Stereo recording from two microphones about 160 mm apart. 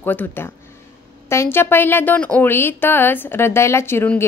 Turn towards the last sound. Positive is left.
turn(degrees=15)  # may be behind; listen again after turning